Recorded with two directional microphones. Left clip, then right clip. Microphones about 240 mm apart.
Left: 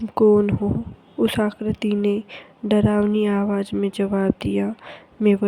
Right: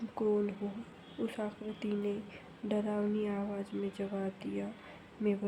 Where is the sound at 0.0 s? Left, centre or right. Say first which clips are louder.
Left 17 dB; left.